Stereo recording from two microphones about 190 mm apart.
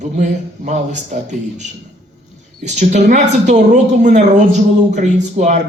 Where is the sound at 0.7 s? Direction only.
40° right (ahead or behind).